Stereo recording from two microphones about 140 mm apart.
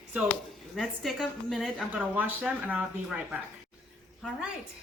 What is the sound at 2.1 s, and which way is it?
Speech, 10° right (ahead or behind).